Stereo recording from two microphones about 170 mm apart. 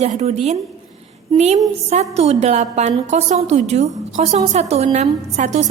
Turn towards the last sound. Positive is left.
turn(degrees=-45)  # may be behind; listen again after turning